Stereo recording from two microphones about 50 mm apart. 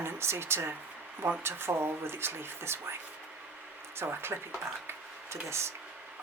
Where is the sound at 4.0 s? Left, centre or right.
Right.